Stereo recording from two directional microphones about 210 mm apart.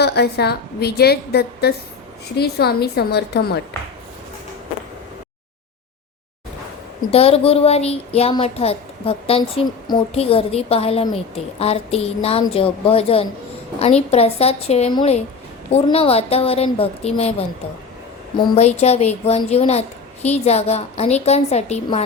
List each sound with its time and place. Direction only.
0.0 s a woman's voice: 50° left (ahead or behind)
7.1 s a child's voice: 30° left (ahead or behind)